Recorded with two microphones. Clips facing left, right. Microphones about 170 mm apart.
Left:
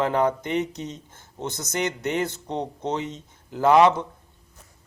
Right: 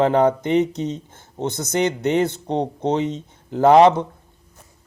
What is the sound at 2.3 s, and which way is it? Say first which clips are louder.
Speech: right 7 dB; 65° right (ahead or behind).